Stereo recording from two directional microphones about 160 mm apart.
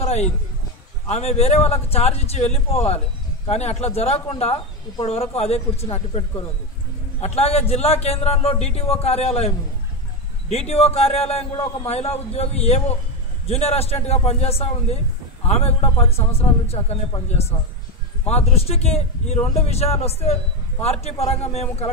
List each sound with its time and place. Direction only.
0.0 s a sound: 45° left (ahead or behind)
1.0 s a man's voice: 40° left (ahead or behind)
10.5 s a man's voice: 40° left (ahead or behind)